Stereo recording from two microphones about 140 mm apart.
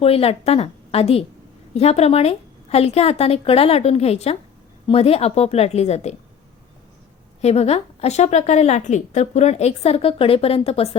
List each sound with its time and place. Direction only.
0.0 s a woman's voice: 45° left (ahead or behind)
7.4 s a woman's voice: 50° left (ahead or behind)